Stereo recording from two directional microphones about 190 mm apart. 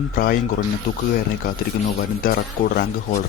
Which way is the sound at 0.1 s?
45° left (ahead or behind).